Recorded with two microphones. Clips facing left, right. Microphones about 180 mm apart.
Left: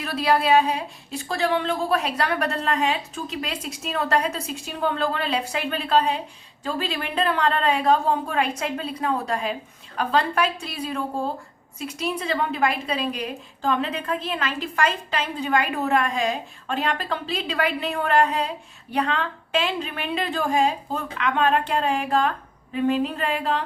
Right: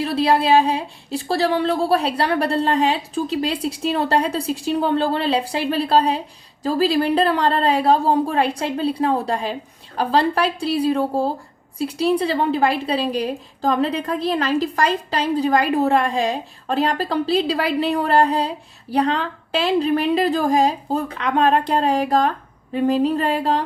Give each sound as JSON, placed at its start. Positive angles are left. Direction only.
{"t": 0.0, "sound": "a woman's voice", "side_deg": -30}